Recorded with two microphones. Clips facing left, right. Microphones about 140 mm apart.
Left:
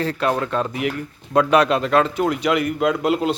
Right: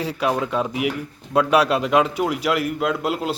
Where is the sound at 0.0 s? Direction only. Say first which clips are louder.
Left 1 dB; 10° right (ahead or behind).